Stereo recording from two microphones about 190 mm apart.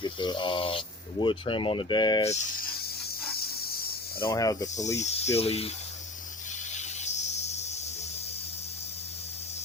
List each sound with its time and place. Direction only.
0.0 s speech: 25° left (ahead or behind)
3.0 s hiss: 55° left (ahead or behind)
4.2 s speech: 20° left (ahead or behind)
4.9 s speech: 35° left (ahead or behind)
6.7 s snake: 35° left (ahead or behind)